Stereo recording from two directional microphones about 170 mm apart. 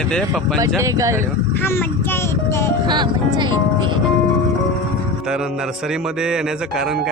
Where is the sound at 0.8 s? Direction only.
20° right (ahead or behind).